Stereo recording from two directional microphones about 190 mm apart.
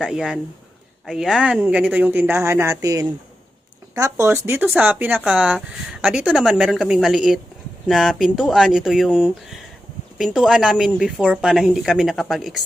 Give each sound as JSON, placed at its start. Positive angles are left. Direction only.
{"t": 0.0, "sound": "speech", "side_deg": -5}